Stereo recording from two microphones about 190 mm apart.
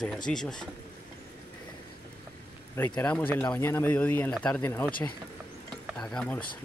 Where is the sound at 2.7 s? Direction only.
10° left (ahead or behind).